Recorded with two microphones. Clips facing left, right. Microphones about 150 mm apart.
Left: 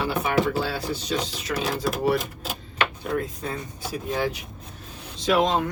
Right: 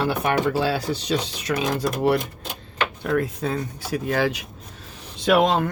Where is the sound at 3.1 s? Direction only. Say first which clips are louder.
Right 5 dB; 75° right (ahead or behind).